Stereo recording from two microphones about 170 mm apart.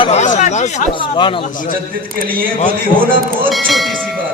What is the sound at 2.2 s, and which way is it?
Speech, 60° right (ahead or behind).